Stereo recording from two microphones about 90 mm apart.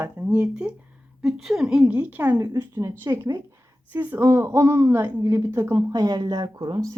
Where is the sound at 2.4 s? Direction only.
35° right (ahead or behind).